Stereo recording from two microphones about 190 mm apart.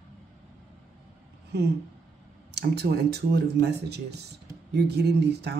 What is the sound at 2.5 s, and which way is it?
Speech, 60° right (ahead or behind).